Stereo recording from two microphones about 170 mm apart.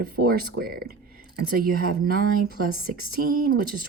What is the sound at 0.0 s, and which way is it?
Speech, 60° right (ahead or behind).